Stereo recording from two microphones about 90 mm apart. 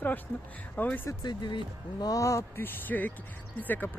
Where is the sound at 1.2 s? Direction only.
55° left (ahead or behind).